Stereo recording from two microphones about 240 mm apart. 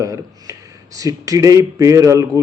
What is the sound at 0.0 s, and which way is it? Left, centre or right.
A man's voice, centre.